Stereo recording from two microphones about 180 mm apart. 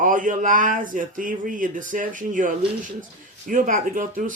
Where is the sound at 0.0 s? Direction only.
45° right (ahead or behind).